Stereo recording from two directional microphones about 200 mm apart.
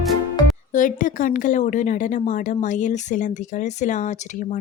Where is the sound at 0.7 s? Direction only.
40° left (ahead or behind).